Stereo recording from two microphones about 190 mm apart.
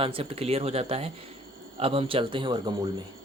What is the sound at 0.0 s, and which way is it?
Speech, 30° right (ahead or behind).